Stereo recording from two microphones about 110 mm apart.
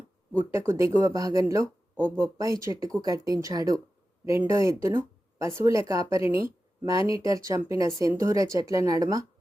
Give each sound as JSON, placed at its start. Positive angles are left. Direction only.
{"t": 0.7, "sound": "speech", "side_deg": -25}
{"t": 6.4, "sound": "a sound", "side_deg": -25}
{"t": 7.2, "sound": "speech", "side_deg": -30}